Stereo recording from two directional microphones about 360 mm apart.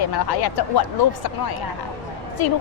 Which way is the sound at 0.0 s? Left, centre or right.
Left.